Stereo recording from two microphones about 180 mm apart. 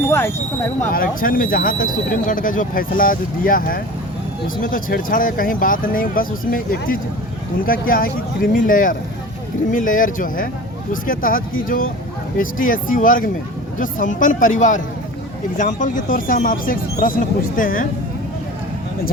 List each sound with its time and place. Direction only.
0.9 s speech: 50° left (ahead or behind)